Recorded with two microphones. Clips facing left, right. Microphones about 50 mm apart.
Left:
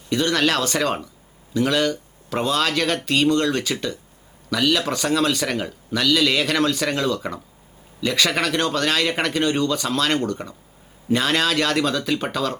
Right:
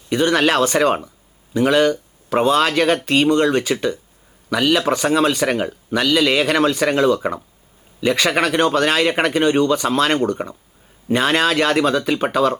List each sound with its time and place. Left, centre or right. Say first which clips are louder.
0.1 s speech: right 4 dB; centre